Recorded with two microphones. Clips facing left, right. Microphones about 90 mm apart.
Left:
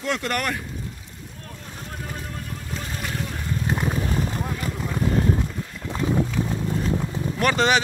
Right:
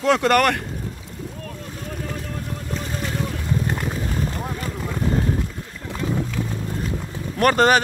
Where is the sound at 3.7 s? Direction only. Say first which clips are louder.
Left 1 dB; 20° left (ahead or behind).